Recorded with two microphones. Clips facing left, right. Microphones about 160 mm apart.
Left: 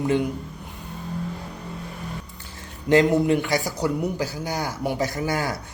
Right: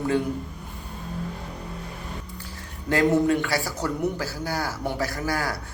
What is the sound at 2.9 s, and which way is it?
A man's voice, 20° left (ahead or behind).